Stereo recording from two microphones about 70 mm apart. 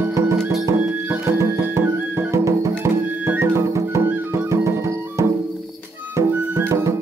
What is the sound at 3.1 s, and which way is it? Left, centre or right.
Music, right.